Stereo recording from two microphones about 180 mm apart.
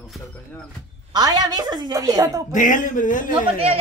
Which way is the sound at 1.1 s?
20° right (ahead or behind).